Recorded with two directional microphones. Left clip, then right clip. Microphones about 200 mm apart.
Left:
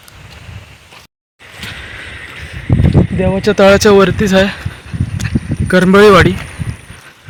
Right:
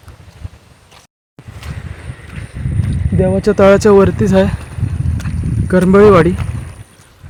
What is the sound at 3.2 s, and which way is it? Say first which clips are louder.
Speech: even; 25° right (ahead or behind).